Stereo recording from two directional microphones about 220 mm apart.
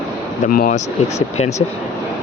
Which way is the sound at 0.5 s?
35° left (ahead or behind).